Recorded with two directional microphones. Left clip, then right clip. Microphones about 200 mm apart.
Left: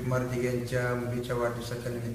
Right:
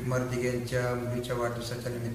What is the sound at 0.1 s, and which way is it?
A man's voice, 5° left (ahead or behind).